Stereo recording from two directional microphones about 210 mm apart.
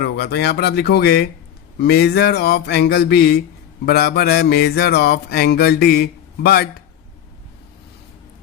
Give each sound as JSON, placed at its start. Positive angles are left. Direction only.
{"t": 0.0, "sound": "music", "side_deg": 50}